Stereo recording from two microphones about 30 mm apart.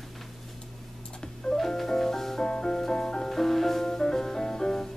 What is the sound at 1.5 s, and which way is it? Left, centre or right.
Music, centre.